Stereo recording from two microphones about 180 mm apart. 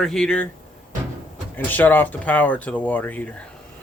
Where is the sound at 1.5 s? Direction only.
10° left (ahead or behind).